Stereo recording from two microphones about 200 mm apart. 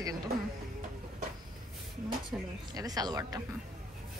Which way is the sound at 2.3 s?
20° right (ahead or behind).